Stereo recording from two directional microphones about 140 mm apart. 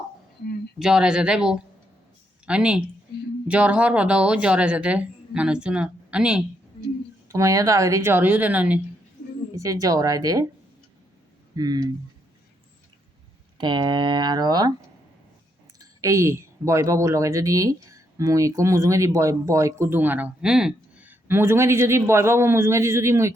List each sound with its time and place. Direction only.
0.8 s speech: 5° right (ahead or behind)
7.3 s speech: 25° right (ahead or behind)
9.6 s speech: 25° right (ahead or behind)
11.5 s speech: 30° right (ahead or behind)
13.6 s speech: 35° right (ahead or behind)
15.8 s speech: 25° right (ahead or behind)